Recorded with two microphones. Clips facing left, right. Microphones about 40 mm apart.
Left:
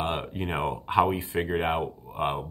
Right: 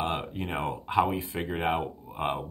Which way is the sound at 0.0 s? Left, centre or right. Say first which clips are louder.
Left 1 dB; centre.